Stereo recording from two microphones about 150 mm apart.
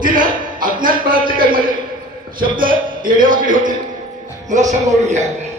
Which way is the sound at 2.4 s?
65° right (ahead or behind).